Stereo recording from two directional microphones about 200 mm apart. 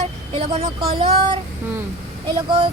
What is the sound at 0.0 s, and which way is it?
Vehicle, 30° right (ahead or behind).